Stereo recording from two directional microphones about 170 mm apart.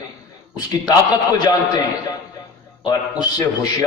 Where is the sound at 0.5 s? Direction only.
20° left (ahead or behind).